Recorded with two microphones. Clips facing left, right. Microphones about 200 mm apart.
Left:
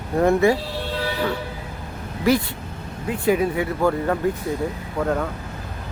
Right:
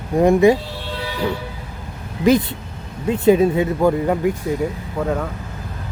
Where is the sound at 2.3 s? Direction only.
20° right (ahead or behind).